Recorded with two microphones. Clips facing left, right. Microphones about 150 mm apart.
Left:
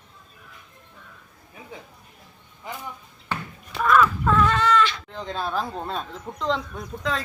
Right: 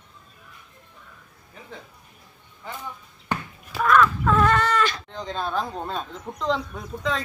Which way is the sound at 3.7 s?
Centre (ahead or behind).